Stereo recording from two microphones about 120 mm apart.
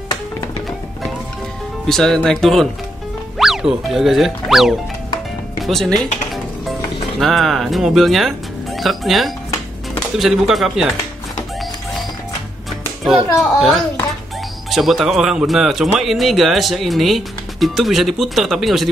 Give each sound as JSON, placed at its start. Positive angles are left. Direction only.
{"t": 1.9, "sound": "speech", "side_deg": 5}
{"t": 7.2, "sound": "speech", "side_deg": 0}
{"t": 13.0, "sound": "speech", "side_deg": 0}